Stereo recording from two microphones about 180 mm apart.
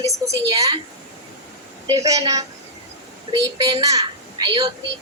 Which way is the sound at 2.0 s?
20° right (ahead or behind).